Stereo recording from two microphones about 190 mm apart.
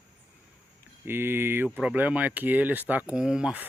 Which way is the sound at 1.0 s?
10° right (ahead or behind).